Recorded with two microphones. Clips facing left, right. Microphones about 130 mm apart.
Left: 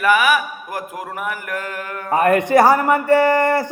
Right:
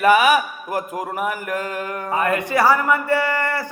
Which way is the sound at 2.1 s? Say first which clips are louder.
Left 7 dB; 45° left (ahead or behind).